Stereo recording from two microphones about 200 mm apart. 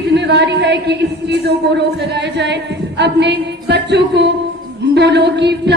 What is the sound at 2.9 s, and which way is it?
A woman's voice, 60° right (ahead or behind).